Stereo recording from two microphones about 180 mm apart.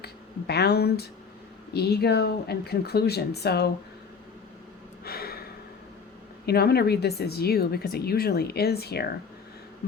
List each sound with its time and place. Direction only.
0.0 s a woman's voice: 65° left (ahead or behind)
5.0 s gasp: 60° left (ahead or behind)
6.4 s a woman's voice: 60° left (ahead or behind)